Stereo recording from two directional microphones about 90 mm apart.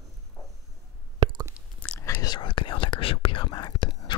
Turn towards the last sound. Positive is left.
turn(degrees=60)  # may be behind; listen again after turning